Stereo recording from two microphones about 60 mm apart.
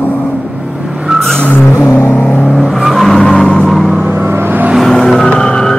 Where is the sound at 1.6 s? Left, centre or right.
Left.